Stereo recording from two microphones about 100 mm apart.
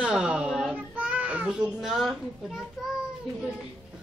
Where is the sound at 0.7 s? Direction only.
15° right (ahead or behind).